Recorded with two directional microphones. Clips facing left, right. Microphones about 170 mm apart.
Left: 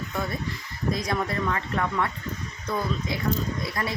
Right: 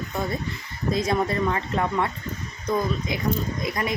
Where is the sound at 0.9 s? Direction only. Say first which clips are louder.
Right 6 dB; 25° right (ahead or behind).